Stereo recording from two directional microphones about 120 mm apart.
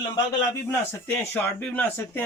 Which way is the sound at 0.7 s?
20° left (ahead or behind).